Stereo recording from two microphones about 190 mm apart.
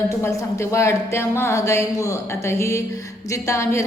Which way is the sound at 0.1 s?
15° left (ahead or behind).